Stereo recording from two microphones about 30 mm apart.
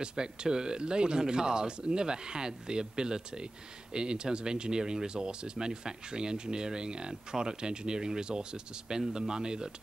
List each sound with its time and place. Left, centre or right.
0.0 s speech: right